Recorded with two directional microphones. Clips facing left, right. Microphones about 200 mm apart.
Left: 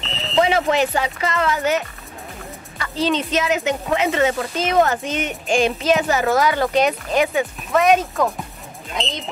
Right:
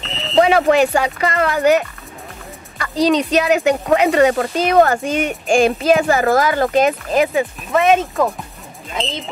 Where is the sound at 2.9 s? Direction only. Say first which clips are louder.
Right 5 dB; 40° right (ahead or behind).